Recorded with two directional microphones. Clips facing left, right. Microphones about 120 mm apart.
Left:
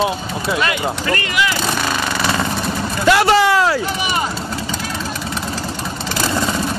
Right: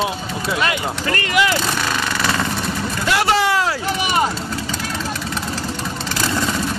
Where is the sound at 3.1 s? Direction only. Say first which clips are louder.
Left 4 dB; 90° left.